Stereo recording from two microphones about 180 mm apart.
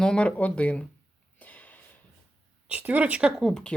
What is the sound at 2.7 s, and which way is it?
Speech, 10° right (ahead or behind).